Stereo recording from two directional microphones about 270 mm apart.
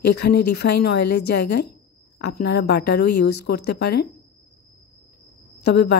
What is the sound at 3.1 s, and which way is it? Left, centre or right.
Speech, left.